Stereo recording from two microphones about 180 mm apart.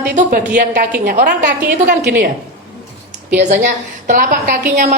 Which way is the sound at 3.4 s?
40° right (ahead or behind).